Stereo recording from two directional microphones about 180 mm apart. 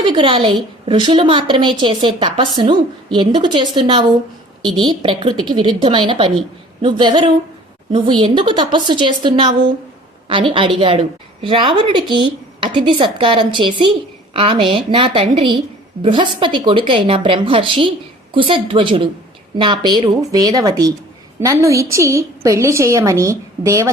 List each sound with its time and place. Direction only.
0.0 s a woman's voice: 25° right (ahead or behind)